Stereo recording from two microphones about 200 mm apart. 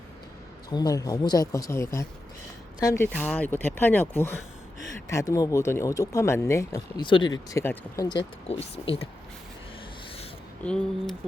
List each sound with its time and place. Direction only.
0.7 s speech: 20° left (ahead or behind)
8.4 s speech: 30° left (ahead or behind)
10.6 s speech: 5° left (ahead or behind)